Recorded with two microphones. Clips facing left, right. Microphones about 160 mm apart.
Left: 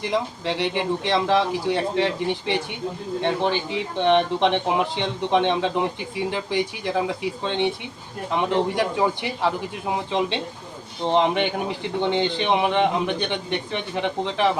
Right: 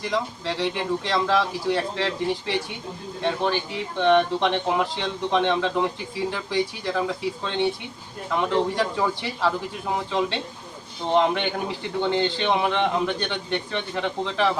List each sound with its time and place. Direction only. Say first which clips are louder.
0.1 s a man's voice: left 2 dB; 20° left (ahead or behind)